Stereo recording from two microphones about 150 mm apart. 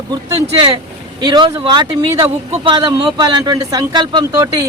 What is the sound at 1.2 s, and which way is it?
Speech, 30° right (ahead or behind).